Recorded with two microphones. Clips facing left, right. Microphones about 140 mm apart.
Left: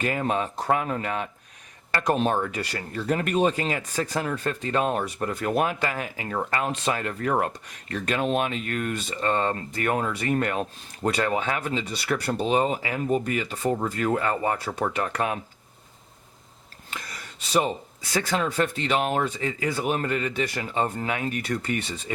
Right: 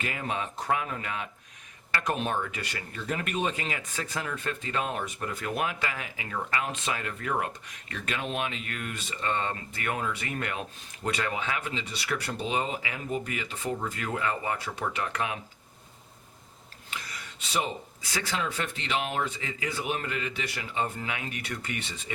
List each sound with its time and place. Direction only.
0.0 s speech: 45° left (ahead or behind)
18.1 s speech: 45° left (ahead or behind)